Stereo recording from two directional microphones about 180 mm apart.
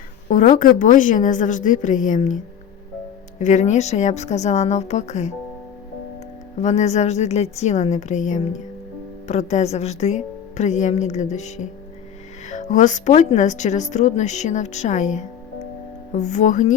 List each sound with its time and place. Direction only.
0.3 s a woman's voice: 45° left (ahead or behind)
6.6 s a woman's voice: 40° left (ahead or behind)